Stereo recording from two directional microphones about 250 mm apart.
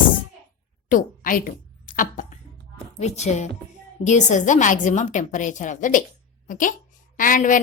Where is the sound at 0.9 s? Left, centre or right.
Left.